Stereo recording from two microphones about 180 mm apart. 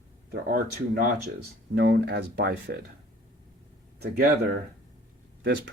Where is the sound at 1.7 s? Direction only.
65° right (ahead or behind).